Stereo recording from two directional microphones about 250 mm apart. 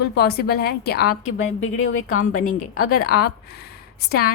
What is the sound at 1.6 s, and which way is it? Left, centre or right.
A woman's voice, left.